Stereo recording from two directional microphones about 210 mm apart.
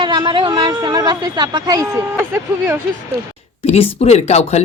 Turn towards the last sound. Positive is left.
turn(degrees=30)  # may be behind; listen again after turning